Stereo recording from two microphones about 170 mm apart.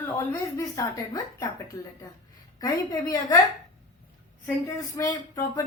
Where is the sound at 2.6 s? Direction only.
25° left (ahead or behind).